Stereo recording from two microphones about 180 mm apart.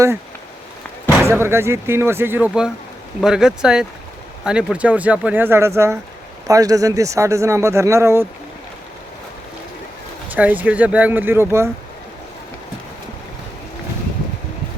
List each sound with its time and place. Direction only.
1.2 s speech: 15° right (ahead or behind)
10.3 s speech: 10° right (ahead or behind)